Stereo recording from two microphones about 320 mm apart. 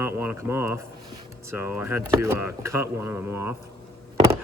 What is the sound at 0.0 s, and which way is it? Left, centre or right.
Speech, centre.